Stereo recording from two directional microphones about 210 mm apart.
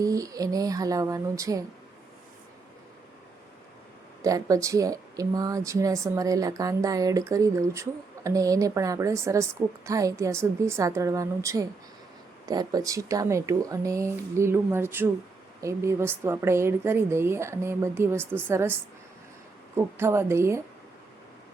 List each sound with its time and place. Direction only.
0.0 s speech: 15° right (ahead or behind)
4.2 s speech: 15° right (ahead or behind)